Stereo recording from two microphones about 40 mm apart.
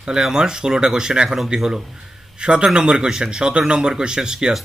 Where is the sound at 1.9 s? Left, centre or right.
Right.